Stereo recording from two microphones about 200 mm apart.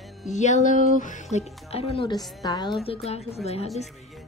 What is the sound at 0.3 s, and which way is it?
A woman's voice, 35° left (ahead or behind).